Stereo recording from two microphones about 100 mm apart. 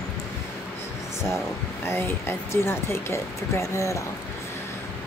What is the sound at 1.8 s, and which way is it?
Speech, 25° left (ahead or behind).